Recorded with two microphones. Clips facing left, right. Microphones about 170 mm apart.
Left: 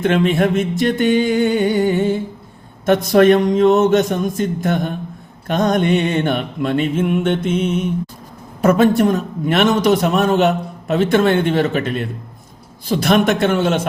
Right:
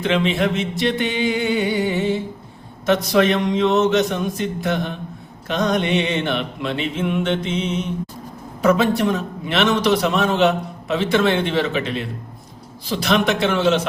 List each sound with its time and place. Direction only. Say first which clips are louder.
0.0 s a man's voice: left 4 dB; 50° left (ahead or behind)